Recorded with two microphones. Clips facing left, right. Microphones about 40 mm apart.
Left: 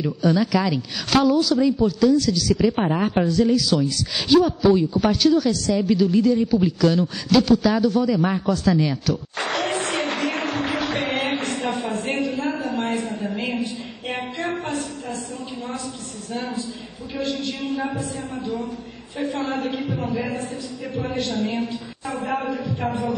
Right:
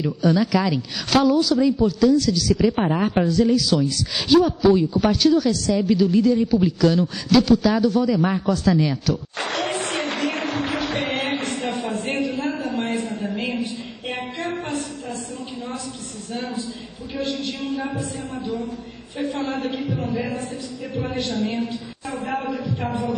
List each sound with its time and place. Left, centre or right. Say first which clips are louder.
0.0 s speech: right 1 dB; centre
9.8 s music: left 1 dB; centre
11.8 s a sound: even; centre
17.5 s speech: left 1 dB; centre
19.3 s a woman's voice: left 1 dB; left
19.9 s speech: even; centre
20.2 s speech: even; left